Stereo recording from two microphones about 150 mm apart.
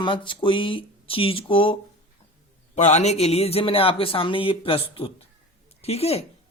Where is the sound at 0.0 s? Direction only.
35° left (ahead or behind).